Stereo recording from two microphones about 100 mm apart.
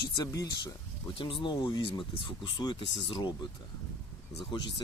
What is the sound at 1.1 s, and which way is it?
Speech, 55° left (ahead or behind).